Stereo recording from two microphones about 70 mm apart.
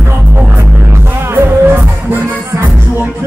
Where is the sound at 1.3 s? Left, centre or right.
Right.